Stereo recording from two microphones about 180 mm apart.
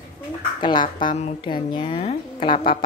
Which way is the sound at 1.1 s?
35° left (ahead or behind).